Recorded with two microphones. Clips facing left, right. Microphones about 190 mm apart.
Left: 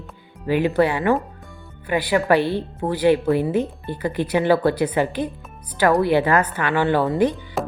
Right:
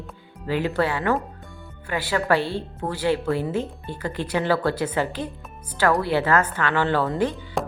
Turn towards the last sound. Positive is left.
turn(degrees=0)  # may be behind; listen again after turning